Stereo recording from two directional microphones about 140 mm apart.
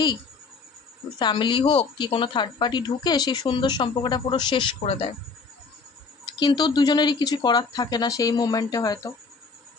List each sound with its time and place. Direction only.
1.2 s a woman's voice: 35° left (ahead or behind)
6.4 s speech: 30° left (ahead or behind)